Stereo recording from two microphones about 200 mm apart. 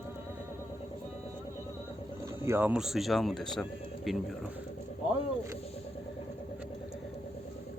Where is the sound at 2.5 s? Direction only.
10° right (ahead or behind).